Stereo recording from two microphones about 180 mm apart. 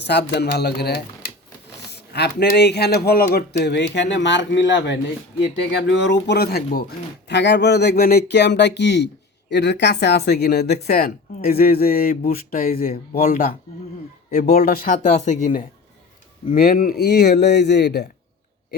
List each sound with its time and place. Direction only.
0.1 s speech: 65° left (ahead or behind)
7.3 s speech: 75° left (ahead or behind); by 15.6 s 45° left (ahead or behind)
16.5 s speech: 55° left (ahead or behind)